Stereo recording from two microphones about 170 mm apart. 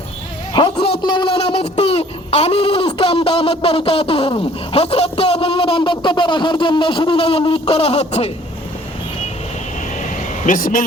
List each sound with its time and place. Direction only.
0.5 s speech: 30° left (ahead or behind)
10.0 s vehicle: 50° left (ahead or behind)